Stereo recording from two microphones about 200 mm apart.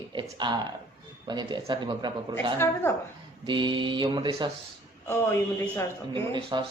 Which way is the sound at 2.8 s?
10° left (ahead or behind).